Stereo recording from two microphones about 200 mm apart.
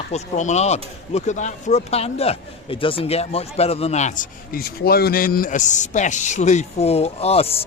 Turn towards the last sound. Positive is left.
turn(degrees=30)  # may be behind; listen again after turning